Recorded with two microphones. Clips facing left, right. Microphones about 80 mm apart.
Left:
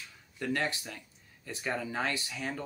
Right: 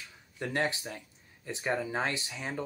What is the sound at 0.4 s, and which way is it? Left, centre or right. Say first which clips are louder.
Speech: right 1 dB; right.